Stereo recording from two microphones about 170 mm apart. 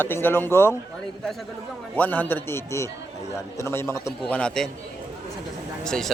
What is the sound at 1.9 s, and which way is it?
A man's voice, 10° left (ahead or behind).